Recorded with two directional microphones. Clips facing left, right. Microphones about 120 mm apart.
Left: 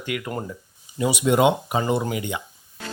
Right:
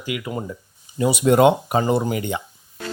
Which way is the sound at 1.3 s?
45° right (ahead or behind).